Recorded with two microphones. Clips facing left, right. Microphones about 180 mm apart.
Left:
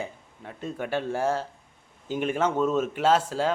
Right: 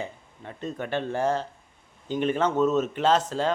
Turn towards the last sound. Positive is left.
turn(degrees=10)  # may be behind; listen again after turning